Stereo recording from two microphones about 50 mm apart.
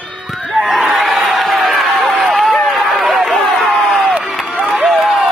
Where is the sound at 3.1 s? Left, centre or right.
Centre.